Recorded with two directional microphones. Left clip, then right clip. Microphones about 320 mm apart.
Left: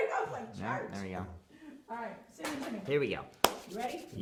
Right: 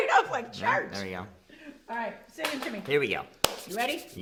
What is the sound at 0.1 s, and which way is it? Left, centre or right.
Music, right.